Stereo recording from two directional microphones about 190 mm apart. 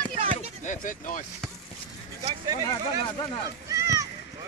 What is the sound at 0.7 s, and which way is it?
Speech, 45° left (ahead or behind).